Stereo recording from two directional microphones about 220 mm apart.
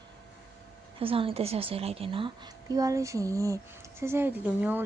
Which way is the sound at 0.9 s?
25° right (ahead or behind).